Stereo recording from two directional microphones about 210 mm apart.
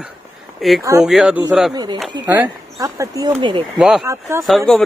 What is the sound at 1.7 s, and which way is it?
Speech, 20° right (ahead or behind).